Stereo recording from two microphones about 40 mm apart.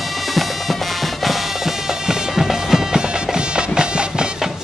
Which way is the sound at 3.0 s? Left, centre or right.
Right.